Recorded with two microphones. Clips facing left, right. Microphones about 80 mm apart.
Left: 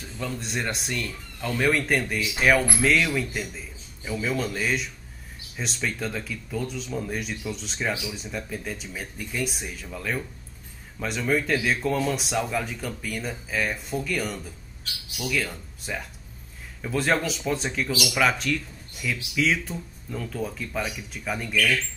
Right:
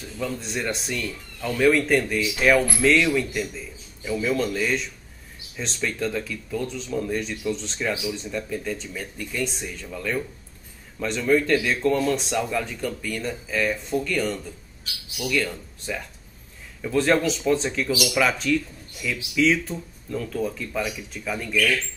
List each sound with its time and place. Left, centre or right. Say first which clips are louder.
0.0 s speech: right 3 dB; centre